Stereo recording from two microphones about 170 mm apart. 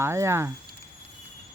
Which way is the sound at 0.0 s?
15° right (ahead or behind).